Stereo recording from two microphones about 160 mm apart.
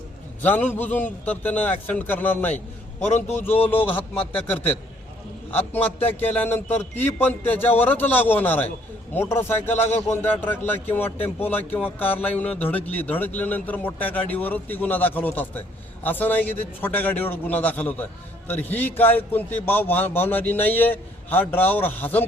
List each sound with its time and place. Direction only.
0.4 s a man's voice: 10° left (ahead or behind)
9.7 s speech: 45° left (ahead or behind)
10.1 s speech: 15° left (ahead or behind)